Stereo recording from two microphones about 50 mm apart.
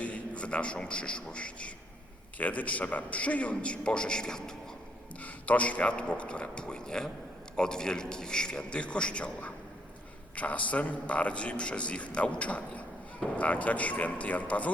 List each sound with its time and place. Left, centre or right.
0.0 s a man's voice: left
5.2 s a man's voice: left